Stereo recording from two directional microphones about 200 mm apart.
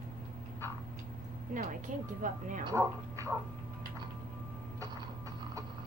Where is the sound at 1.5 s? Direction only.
40° right (ahead or behind).